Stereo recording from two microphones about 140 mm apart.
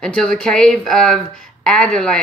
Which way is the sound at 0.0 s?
5° left (ahead or behind).